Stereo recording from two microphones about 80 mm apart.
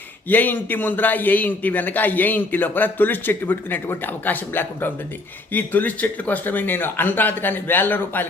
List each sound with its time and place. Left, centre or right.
0.3 s a man's voice: left